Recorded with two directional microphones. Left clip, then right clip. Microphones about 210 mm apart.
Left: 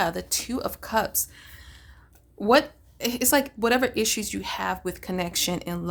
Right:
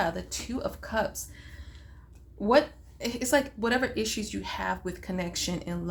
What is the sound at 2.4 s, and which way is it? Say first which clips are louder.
Speech: left 3 dB; 50° left (ahead or behind).